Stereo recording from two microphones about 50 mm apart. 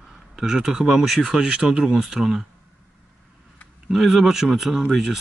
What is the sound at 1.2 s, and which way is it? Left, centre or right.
Speech, centre.